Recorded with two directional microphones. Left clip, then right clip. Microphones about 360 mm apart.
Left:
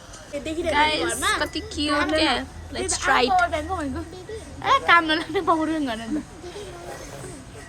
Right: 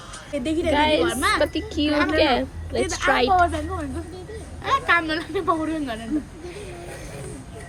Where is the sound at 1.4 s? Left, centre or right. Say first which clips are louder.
Right 4 dB; centre.